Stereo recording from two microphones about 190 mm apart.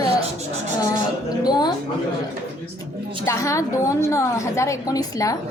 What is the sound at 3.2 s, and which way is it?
A woman's voice, 15° left (ahead or behind).